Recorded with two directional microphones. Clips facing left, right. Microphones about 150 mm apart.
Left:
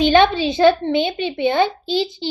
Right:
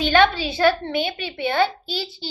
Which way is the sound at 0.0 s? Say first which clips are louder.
Left 4 dB; 20° left (ahead or behind).